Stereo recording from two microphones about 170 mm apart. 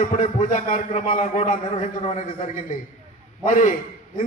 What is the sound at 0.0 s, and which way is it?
A man's voice, 45° left (ahead or behind).